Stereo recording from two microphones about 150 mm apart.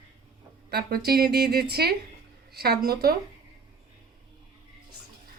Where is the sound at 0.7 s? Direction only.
90° right.